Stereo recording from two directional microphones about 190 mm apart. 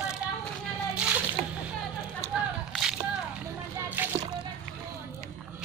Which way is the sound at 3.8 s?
10° right (ahead or behind).